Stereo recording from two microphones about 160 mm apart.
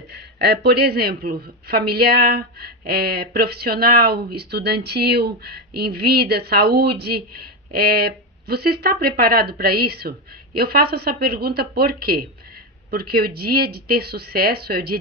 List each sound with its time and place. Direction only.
0.1 s speech: 90° right